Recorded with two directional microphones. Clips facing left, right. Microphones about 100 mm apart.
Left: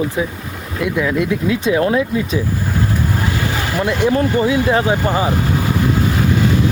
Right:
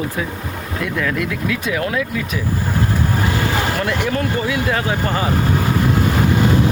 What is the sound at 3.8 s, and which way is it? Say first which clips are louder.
Speech: left 4 dB; 25° left (ahead or behind).